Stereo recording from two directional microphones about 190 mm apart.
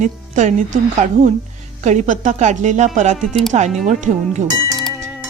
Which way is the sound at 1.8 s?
40° right (ahead or behind).